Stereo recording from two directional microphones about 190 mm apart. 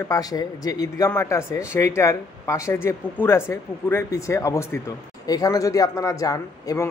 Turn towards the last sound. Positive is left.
turn(degrees=20)  # may be behind; listen again after turning